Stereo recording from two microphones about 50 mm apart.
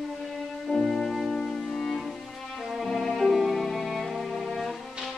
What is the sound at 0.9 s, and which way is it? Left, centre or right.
Music, centre.